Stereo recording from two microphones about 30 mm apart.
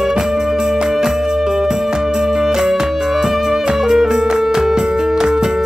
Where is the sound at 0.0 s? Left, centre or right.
Centre.